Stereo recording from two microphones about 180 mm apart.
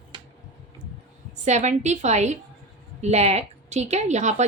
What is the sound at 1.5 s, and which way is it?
A woman's voice, 40° right (ahead or behind).